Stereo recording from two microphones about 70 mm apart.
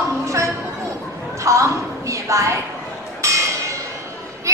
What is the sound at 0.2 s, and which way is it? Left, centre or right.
Music, right.